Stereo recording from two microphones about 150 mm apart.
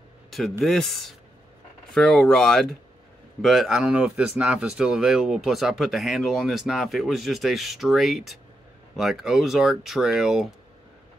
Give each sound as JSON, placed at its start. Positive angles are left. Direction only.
{"t": 0.3, "sound": "speech", "side_deg": 0}